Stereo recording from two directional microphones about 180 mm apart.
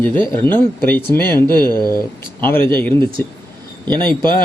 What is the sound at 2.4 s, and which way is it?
Speech, 10° left (ahead or behind).